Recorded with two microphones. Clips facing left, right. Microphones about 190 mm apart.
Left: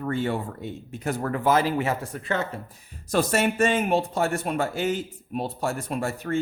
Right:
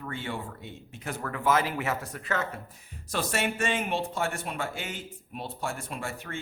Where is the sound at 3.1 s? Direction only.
40° left (ahead or behind).